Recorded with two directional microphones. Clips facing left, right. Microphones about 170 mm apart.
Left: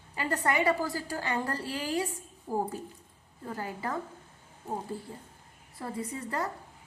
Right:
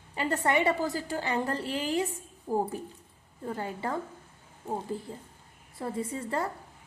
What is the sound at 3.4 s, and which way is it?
Speech, 25° right (ahead or behind).